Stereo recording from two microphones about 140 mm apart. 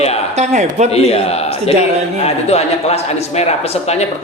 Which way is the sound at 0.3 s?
55° right (ahead or behind).